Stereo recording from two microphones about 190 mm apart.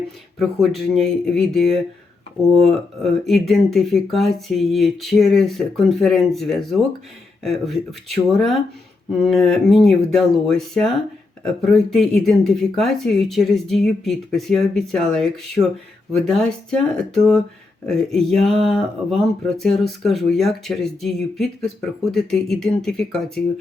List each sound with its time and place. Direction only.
0.3 s speech: centre (ahead or behind)